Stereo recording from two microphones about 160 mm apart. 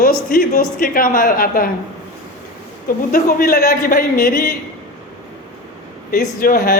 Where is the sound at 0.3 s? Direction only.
65° left (ahead or behind).